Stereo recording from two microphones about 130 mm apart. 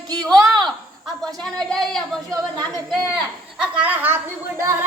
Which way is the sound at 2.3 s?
30° right (ahead or behind).